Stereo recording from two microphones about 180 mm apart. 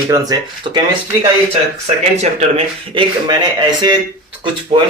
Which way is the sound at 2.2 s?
35° right (ahead or behind).